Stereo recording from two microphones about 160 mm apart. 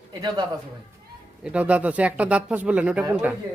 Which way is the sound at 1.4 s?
10° right (ahead or behind).